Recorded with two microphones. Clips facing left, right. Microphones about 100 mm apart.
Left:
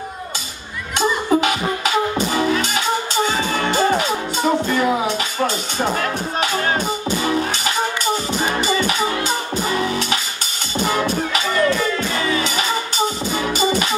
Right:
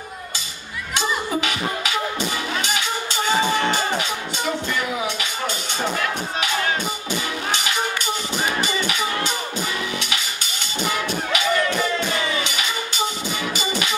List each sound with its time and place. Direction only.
0.9 s music: 40° left (ahead or behind)
4.1 s music: 40° left (ahead or behind)
5.9 s speech: 40° left (ahead or behind)
7.2 s music: 35° left (ahead or behind)
9.7 s music: 40° left (ahead or behind)